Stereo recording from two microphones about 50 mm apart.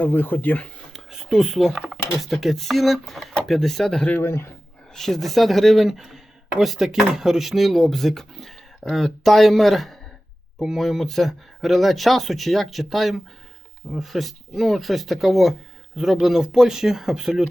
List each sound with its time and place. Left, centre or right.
0.0 s speech: left
0.9 s speech: centre
4.2 s a man's voice: left
4.9 s speech: centre